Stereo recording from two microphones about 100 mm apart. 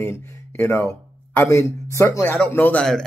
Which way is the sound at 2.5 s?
20° left (ahead or behind).